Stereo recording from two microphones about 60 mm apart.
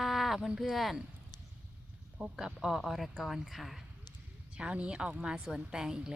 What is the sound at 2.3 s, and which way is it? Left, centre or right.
Speech, centre.